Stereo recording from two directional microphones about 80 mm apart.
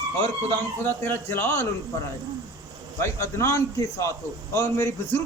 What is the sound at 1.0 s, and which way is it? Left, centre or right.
Speech, left.